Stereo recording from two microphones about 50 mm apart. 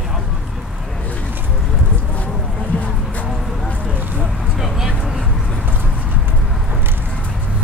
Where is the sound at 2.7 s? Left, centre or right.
Left.